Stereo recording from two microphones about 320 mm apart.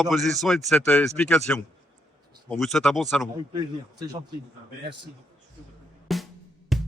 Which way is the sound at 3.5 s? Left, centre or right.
Centre.